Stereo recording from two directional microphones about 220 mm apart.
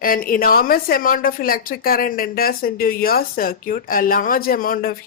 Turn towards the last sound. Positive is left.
turn(degrees=40)  # may be behind; listen again after turning